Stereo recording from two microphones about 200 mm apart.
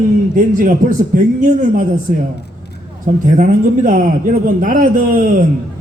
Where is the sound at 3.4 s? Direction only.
40° right (ahead or behind).